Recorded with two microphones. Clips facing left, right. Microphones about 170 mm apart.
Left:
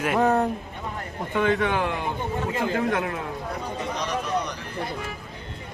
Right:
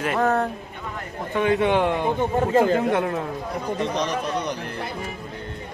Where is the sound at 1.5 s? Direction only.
25° right (ahead or behind).